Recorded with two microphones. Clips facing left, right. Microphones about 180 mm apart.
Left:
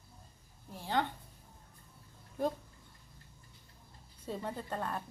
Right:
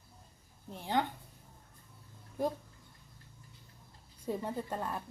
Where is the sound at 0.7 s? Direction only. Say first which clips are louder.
Right 1 dB; 15° right (ahead or behind).